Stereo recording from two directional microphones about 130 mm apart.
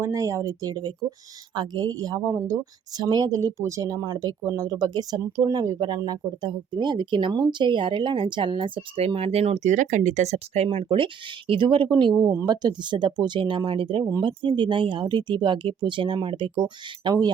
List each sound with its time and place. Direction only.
0.0 s a woman's voice: 25° right (ahead or behind)